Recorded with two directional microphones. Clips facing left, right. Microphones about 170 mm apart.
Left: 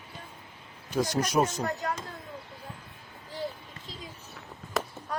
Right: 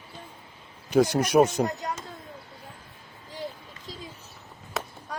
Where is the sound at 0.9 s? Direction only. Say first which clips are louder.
Right 6 dB; 65° right (ahead or behind).